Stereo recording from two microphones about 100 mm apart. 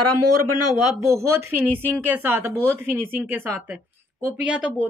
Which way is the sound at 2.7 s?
20° right (ahead or behind).